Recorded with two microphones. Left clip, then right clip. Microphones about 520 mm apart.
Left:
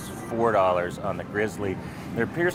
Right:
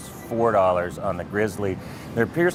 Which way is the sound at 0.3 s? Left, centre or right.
Right.